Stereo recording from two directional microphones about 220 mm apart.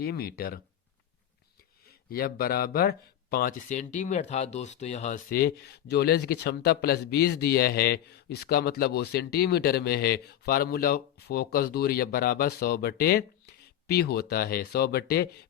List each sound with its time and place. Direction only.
0.0 s speech: 45° left (ahead or behind)
1.9 s speech: 45° left (ahead or behind)